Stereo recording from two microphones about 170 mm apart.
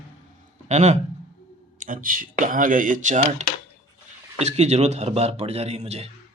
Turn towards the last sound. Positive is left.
turn(degrees=-40)  # may be behind; listen again after turning